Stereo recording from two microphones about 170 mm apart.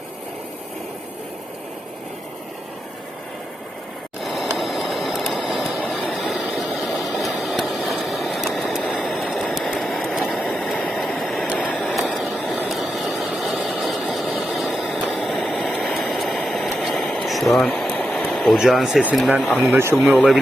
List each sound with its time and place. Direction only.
4.2 s a sound: centre (ahead or behind)
19.0 s speech: centre (ahead or behind)
19.5 s speech: 10° right (ahead or behind)
20.0 s speech: centre (ahead or behind)